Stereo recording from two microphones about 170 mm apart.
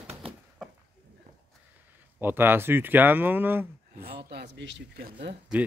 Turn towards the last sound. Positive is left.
turn(degrees=-65)  # may be behind; listen again after turning